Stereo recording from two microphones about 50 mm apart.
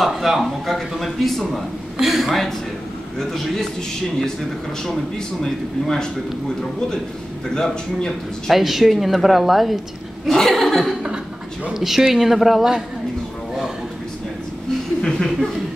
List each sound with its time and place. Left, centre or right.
0.1 s a man's voice: centre
4.8 s speech: centre
7.5 s speech: centre
8.5 s a man's voice: centre
10.2 s chuckle: centre
11.7 s a man's voice: centre
15.0 s a sound: centre